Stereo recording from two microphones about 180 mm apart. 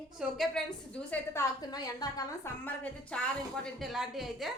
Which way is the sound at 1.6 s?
20° left (ahead or behind).